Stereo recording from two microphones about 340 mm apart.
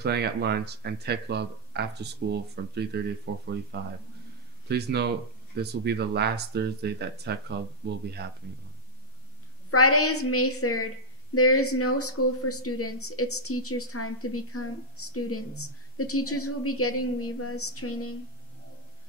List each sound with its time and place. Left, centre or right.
0.0 s speech: right
9.7 s speech: left